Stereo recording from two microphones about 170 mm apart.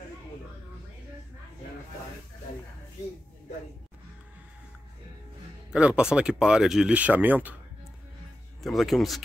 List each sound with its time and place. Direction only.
5.7 s speech: 5° right (ahead or behind)
8.6 s speech: centre (ahead or behind)